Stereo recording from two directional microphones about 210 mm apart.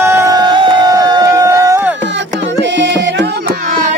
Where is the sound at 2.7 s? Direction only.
55° right (ahead or behind).